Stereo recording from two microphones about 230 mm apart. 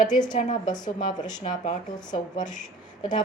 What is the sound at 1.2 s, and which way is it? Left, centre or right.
Speech, left.